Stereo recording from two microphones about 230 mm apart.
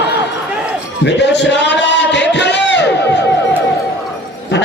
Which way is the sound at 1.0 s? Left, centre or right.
Left.